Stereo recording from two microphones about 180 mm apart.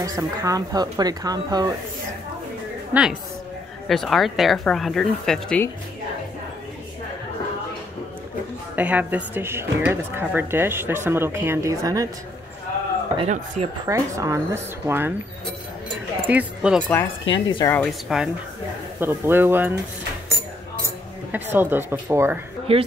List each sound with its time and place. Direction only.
0.0 s speech: 20° right (ahead or behind)
2.9 s a woman's voice: 5° right (ahead or behind)
8.7 s speech: 10° right (ahead or behind)
13.2 s speech: 35° right (ahead or behind)
13.8 s speech: 15° right (ahead or behind)
16.3 s speech: 10° right (ahead or behind)
17.3 s a woman's voice: 30° left (ahead or behind)
17.6 s speech: 5° left (ahead or behind)
18.9 s speech: 10° right (ahead or behind)
21.3 s speech: 10° right (ahead or behind)
22.7 s speech: 30° right (ahead or behind)